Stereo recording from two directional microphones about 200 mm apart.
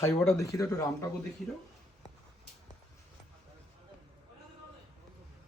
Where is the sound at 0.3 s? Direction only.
15° left (ahead or behind).